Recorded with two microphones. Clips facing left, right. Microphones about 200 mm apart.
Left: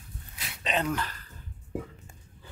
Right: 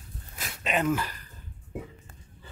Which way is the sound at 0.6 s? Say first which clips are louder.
Right 3 dB; 5° right (ahead or behind).